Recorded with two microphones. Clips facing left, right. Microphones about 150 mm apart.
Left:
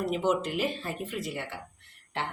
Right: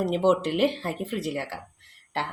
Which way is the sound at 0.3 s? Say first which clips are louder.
Right 7 dB; 75° right (ahead or behind).